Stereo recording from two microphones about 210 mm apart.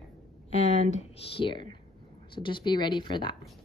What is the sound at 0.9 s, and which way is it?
A woman's voice, 25° left (ahead or behind).